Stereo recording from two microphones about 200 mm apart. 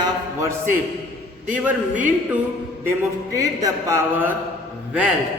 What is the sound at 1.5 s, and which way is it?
Speech, 5° right (ahead or behind).